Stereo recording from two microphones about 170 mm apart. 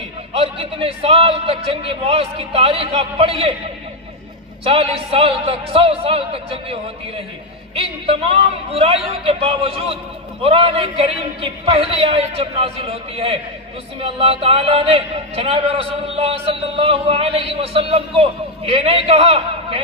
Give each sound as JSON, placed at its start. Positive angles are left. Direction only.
{"t": 0.3, "sound": "a man's voice", "side_deg": -35}
{"t": 4.6, "sound": "a man's voice", "side_deg": -35}
{"t": 7.8, "sound": "a man's voice", "side_deg": -35}